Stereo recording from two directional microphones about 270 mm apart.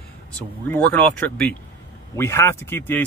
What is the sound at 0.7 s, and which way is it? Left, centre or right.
Speech, centre.